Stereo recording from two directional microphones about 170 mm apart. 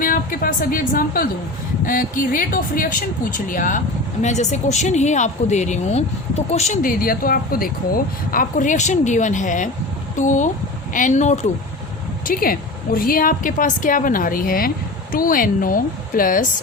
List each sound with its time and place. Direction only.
0.0 s speech: 55° left (ahead or behind)
12.2 s a woman's voice: 60° left (ahead or behind)